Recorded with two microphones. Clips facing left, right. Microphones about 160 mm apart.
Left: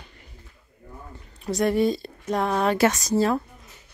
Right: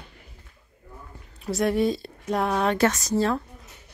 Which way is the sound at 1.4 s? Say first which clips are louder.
Left 1 dB; centre (ahead or behind).